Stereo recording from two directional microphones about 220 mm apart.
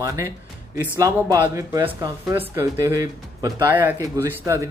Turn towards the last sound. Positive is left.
turn(degrees=-15)  # may be behind; listen again after turning